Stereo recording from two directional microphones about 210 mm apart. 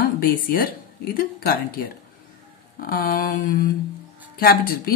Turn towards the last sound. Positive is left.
turn(degrees=45)  # may be behind; listen again after turning